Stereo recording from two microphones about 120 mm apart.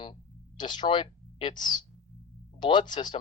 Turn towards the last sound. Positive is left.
turn(degrees=40)  # may be behind; listen again after turning